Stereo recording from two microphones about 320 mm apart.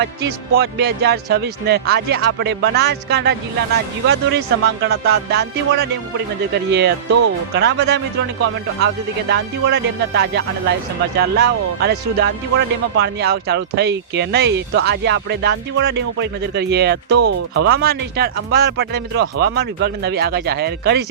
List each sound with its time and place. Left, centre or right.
0.0 s speech: right
9.3 s speech: right